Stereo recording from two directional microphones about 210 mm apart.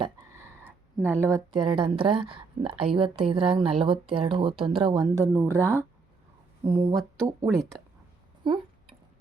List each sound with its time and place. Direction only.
0.0 s a sound: 15° right (ahead or behind)
0.9 s speech: 10° right (ahead or behind)
1.5 s a woman's voice: 25° right (ahead or behind)
6.6 s speech: 30° right (ahead or behind)
7.5 s speech: centre (ahead or behind)
8.4 s a sound: 25° right (ahead or behind)